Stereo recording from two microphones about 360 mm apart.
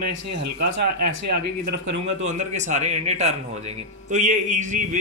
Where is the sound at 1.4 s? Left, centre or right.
Right.